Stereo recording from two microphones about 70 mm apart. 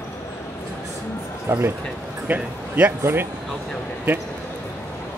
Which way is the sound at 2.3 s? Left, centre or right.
Right.